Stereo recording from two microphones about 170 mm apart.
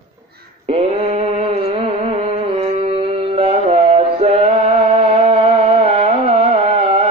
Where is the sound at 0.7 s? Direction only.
35° right (ahead or behind).